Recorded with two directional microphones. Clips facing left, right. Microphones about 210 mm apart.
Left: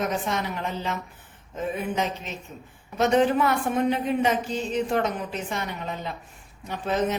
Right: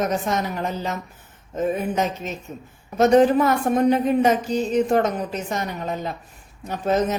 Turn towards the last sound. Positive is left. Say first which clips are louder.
# right 4 dB
turn(degrees=-40)  # may be behind; listen again after turning